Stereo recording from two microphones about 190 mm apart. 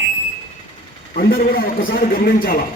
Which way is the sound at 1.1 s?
50° left (ahead or behind).